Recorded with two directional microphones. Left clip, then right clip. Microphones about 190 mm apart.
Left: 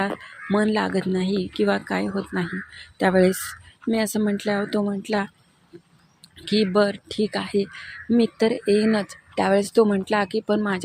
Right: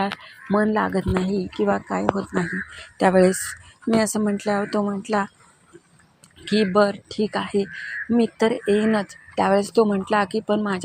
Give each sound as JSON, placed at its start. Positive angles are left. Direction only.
{"t": 0.5, "sound": "speech", "side_deg": 15}
{"t": 6.4, "sound": "speech", "side_deg": 15}